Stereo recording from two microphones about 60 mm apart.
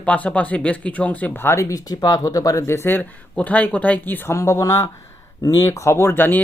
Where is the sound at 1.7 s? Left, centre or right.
Left.